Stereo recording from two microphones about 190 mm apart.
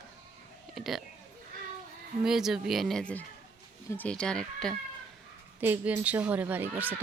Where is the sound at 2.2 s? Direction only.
Centre (ahead or behind).